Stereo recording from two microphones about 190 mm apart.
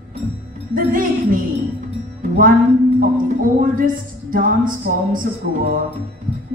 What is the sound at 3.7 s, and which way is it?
A woman's voice, 45° right (ahead or behind).